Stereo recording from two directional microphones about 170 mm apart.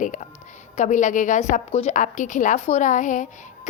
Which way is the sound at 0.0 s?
50° left (ahead or behind).